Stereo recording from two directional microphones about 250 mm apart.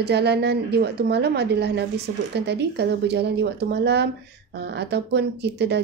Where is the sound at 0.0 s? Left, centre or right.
Right.